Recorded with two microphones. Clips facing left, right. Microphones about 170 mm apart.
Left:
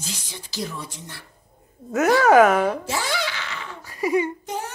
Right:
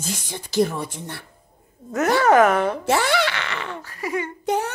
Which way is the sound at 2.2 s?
5° left (ahead or behind).